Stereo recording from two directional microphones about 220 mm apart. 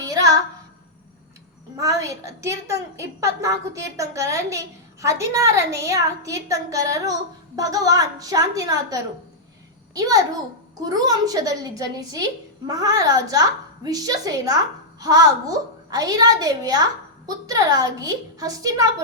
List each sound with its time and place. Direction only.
0.0 s child singing: 15° right (ahead or behind)
1.7 s a woman's voice: 15° right (ahead or behind)